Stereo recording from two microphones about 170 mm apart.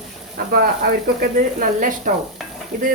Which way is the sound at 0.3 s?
60° right (ahead or behind).